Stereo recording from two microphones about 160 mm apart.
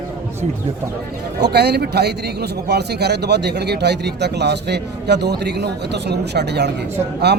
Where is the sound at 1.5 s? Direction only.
90° right.